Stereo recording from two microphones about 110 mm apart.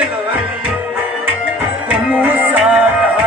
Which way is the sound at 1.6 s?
15° right (ahead or behind).